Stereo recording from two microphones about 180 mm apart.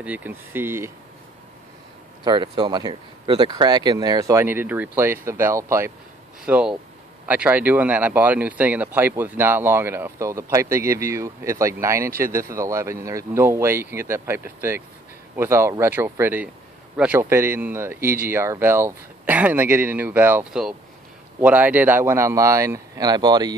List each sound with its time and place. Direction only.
0.0 s speech: 10° right (ahead or behind)
2.2 s speech: 25° right (ahead or behind)